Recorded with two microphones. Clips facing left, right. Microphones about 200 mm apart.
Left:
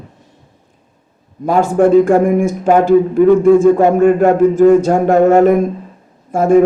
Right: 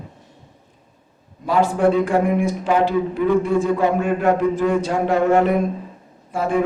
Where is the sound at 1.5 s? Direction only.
45° left (ahead or behind).